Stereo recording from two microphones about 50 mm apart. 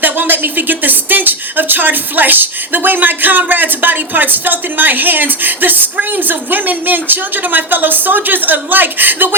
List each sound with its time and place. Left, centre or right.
0.0 s speech: right